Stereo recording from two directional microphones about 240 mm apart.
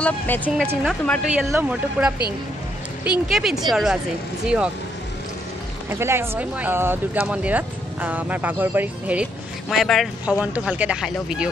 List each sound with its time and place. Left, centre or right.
0.5 s a woman's voice: centre
5.9 s speech: centre